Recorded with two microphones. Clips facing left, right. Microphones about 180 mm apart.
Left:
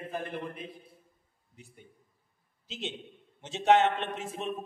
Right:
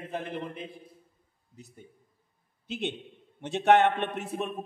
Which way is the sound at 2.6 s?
60° right (ahead or behind).